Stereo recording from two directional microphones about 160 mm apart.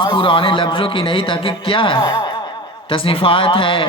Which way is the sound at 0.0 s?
30° left (ahead or behind).